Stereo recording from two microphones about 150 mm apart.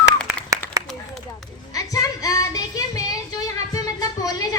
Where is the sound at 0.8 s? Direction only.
25° right (ahead or behind).